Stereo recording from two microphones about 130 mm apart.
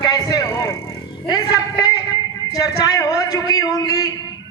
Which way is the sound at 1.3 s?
30° left (ahead or behind).